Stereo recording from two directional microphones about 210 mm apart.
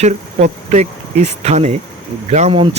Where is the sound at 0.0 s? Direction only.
35° right (ahead or behind).